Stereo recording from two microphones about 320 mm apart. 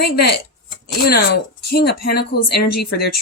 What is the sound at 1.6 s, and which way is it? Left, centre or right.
Speech, left.